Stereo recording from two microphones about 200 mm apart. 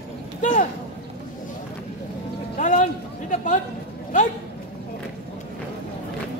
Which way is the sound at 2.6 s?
40° left (ahead or behind).